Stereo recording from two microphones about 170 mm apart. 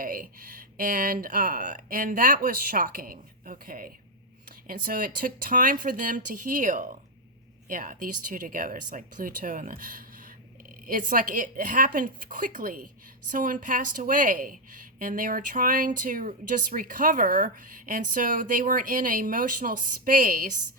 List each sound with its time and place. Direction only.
0.0 s speech: 55° right (ahead or behind)